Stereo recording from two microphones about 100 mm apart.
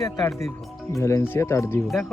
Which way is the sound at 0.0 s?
35° left (ahead or behind).